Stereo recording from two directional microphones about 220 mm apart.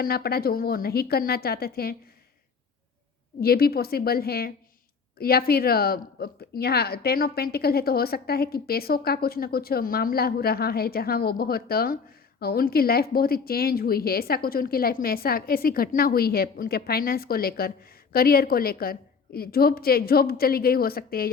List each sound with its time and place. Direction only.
0.0 s a woman's voice: 45° left (ahead or behind)
3.4 s a woman's voice: 45° left (ahead or behind)